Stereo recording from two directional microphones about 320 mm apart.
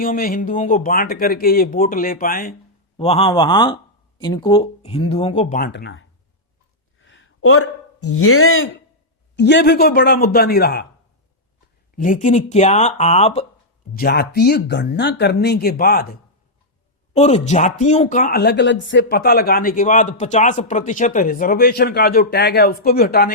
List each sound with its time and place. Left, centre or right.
0.0 s speech: left
7.0 s a sound: left
9.3 s speech: left
11.9 s speech: left
17.2 s speech: left